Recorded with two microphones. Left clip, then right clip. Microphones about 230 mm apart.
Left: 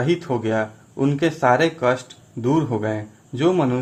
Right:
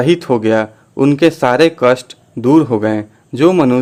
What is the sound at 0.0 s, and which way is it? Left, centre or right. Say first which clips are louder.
Speech: right 9 dB; right.